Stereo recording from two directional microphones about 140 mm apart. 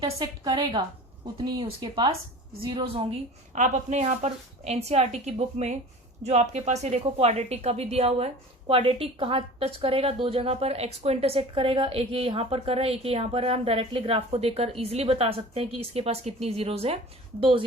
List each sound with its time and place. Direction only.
0.0 s a woman's voice: 30° right (ahead or behind)
3.5 s a woman's voice: 60° right (ahead or behind)